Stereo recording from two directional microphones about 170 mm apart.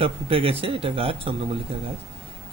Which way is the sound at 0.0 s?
35° right (ahead or behind).